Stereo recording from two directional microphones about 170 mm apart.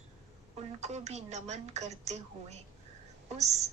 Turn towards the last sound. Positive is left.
turn(degrees=-40)  # may be behind; listen again after turning